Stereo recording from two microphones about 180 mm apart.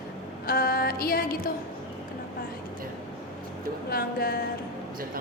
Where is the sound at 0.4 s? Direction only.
55° left (ahead or behind).